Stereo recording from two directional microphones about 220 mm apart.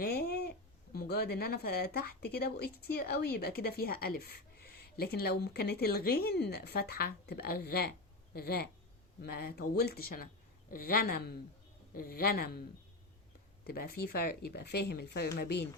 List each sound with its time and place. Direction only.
0.0 s babbling: 45° left (ahead or behind)
0.9 s speech: 45° left (ahead or behind)
13.7 s speech: 45° left (ahead or behind)